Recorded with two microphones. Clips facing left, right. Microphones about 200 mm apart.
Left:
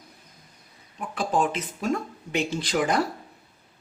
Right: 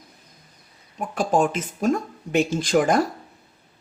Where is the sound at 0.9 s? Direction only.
45° right (ahead or behind).